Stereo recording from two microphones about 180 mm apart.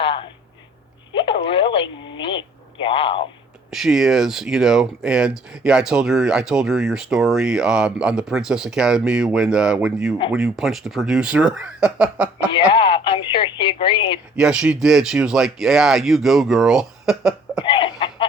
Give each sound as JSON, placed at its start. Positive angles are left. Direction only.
{"t": 0.0, "sound": "a sound", "side_deg": 30}
{"t": 2.0, "sound": "speech", "side_deg": 25}
{"t": 3.7, "sound": "speech", "side_deg": 0}
{"t": 12.5, "sound": "radio", "side_deg": 25}
{"t": 14.3, "sound": "speech", "side_deg": -5}
{"t": 17.6, "sound": "a sound", "side_deg": 25}